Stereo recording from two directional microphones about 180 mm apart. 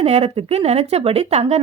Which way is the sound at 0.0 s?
35° right (ahead or behind).